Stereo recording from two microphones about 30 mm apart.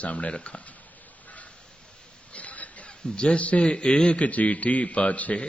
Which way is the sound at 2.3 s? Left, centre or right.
Left.